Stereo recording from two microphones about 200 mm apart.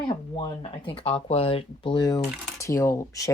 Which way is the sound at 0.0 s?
25° left (ahead or behind).